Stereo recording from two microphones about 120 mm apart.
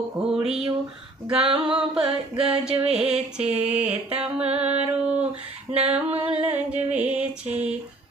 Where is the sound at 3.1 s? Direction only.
10° right (ahead or behind).